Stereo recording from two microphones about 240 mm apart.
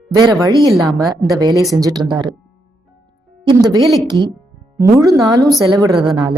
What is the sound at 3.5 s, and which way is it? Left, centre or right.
Speech, centre.